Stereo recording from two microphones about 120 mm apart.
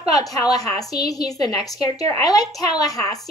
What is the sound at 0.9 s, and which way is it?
Speech, 30° left (ahead or behind).